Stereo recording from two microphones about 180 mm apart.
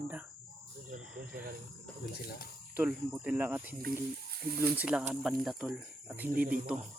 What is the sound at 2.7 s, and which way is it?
Speech, 10° right (ahead or behind).